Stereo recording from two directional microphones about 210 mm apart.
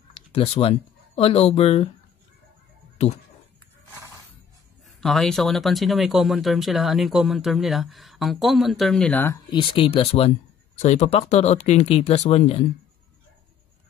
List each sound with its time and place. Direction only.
0.1 s speech: 25° left (ahead or behind)
5.0 s speech: centre (ahead or behind); by 12.6 s 30° left (ahead or behind)